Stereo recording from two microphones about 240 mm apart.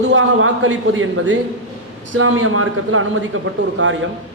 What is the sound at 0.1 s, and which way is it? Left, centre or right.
A man's voice, right.